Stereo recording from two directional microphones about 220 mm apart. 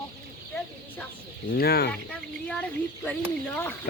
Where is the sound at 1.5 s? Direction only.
45° left (ahead or behind).